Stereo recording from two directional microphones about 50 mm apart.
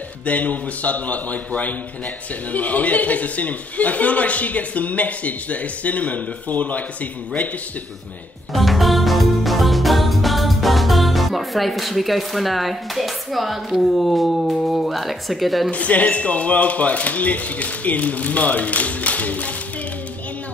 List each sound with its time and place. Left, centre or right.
0.2 s a man's voice: left
8.5 s music: centre
13.9 s speech: centre
15.7 s a man's voice: left